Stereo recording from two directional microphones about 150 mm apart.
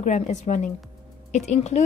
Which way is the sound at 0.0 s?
55° left (ahead or behind).